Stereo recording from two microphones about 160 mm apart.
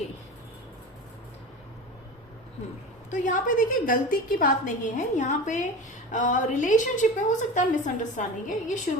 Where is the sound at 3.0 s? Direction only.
50° left (ahead or behind).